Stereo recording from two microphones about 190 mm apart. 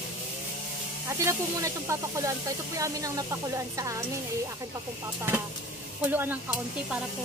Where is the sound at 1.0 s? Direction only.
15° right (ahead or behind).